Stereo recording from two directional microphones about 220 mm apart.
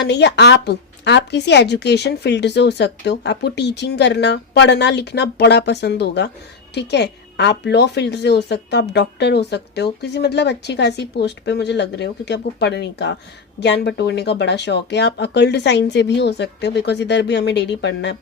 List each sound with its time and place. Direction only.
0.0 s a woman's voice: 50° left (ahead or behind)